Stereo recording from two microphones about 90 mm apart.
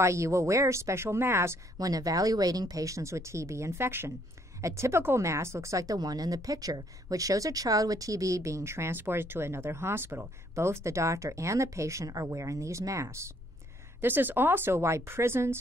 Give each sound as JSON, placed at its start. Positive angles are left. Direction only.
{"t": 0.0, "sound": "a woman's voice", "side_deg": -35}
{"t": 1.8, "sound": "a woman's voice", "side_deg": -40}